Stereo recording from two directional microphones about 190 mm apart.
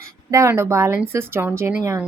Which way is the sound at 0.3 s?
15° right (ahead or behind).